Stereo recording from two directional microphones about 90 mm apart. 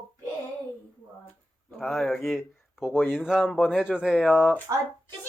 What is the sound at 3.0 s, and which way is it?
Speech, 25° left (ahead or behind).